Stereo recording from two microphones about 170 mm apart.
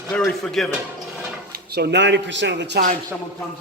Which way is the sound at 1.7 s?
80° right.